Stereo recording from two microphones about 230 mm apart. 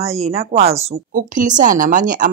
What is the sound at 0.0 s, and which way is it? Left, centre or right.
Speech, right.